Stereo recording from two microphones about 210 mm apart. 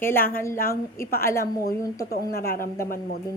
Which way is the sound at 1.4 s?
45° left (ahead or behind).